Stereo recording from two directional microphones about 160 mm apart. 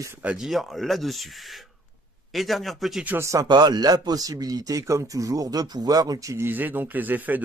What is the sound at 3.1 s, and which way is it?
Speech, 20° right (ahead or behind).